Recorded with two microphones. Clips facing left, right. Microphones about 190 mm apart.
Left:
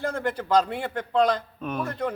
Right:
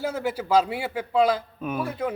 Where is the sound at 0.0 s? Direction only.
5° right (ahead or behind).